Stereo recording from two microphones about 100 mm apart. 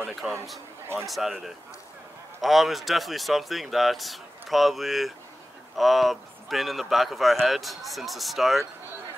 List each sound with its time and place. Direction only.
0.0 s speech: centre (ahead or behind)